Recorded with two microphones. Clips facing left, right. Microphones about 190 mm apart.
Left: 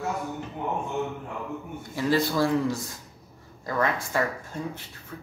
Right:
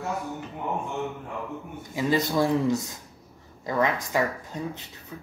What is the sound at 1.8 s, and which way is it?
Speech, 15° right (ahead or behind).